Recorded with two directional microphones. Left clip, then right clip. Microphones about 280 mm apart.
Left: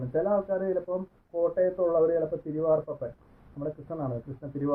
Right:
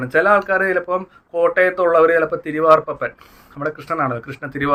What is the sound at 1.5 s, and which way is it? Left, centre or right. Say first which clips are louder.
Speech: right 10 dB; right.